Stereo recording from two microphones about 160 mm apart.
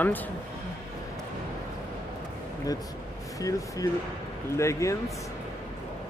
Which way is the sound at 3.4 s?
20° left (ahead or behind).